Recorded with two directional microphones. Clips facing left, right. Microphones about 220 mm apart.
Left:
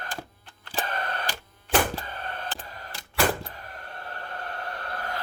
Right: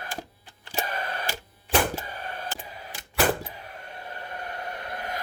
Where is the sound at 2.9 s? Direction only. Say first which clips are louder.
Right 1 dB; 20° right (ahead or behind).